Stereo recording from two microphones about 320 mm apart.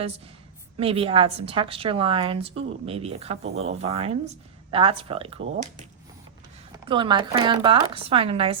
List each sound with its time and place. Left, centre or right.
0.8 s a woman's voice: centre
6.8 s a woman's voice: centre